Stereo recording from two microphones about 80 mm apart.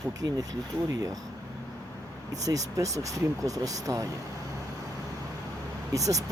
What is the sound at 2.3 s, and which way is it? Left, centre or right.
Speech, right.